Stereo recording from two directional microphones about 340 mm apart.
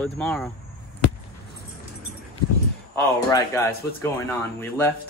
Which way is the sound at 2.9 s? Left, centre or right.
Centre.